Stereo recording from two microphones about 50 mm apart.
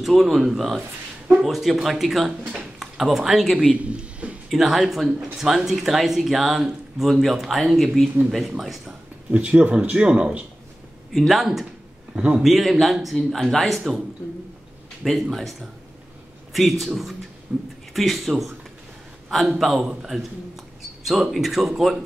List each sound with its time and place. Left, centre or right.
0.0 s a man's voice: centre
3.7 s a sound: right
4.5 s speech: centre
9.3 s speech: right
11.1 s speech: centre
12.1 s a man's voice: right
12.4 s speech: centre
15.3 s speech: centre
16.8 s speech: centre
17.5 s speech: right
17.9 s speech: centre
19.3 s a man's voice: centre